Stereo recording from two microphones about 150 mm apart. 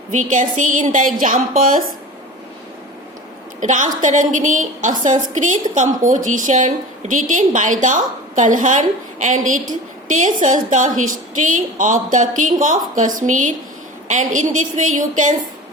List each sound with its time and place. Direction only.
0.1 s a woman's voice: 55° right (ahead or behind)
3.6 s a woman's voice: 55° right (ahead or behind)